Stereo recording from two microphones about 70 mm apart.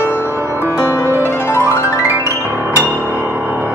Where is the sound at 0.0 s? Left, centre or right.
Right.